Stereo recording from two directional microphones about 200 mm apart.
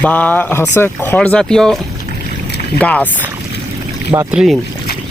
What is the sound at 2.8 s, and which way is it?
Speech, 5° left (ahead or behind).